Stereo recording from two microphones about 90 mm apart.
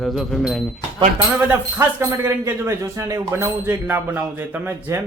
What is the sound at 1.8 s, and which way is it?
Speech, 30° right (ahead or behind).